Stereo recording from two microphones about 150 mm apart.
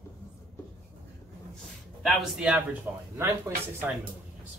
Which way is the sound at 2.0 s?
5° right (ahead or behind).